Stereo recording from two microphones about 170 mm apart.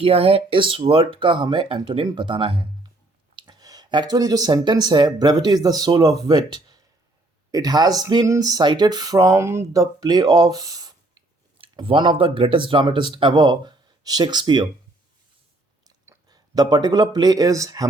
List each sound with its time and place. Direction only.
0.0 s speech: 35° right (ahead or behind)
16.0 s speech: 25° right (ahead or behind)